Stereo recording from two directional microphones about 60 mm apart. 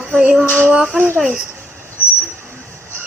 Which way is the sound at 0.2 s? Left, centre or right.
Centre.